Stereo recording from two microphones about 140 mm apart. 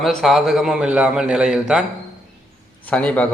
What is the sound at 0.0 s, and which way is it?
A man's voice, centre (ahead or behind).